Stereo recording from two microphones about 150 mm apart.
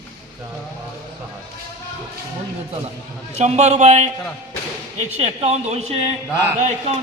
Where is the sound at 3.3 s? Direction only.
50° right (ahead or behind).